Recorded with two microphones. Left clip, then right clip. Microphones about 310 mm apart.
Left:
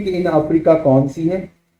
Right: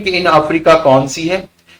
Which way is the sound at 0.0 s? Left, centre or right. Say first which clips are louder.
Right 6 dB; centre.